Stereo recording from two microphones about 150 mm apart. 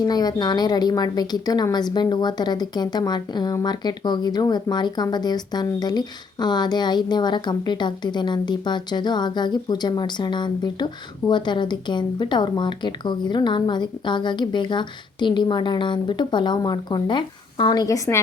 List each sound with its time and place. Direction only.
0.0 s a woman's voice: 25° left (ahead or behind)